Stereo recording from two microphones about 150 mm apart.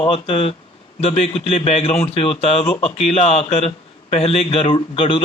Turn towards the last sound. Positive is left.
turn(degrees=35)  # may be behind; listen again after turning